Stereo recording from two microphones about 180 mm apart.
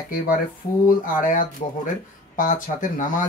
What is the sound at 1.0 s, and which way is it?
Speech, 45° left (ahead or behind).